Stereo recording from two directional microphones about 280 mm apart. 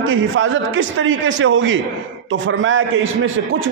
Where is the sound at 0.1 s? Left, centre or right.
Right.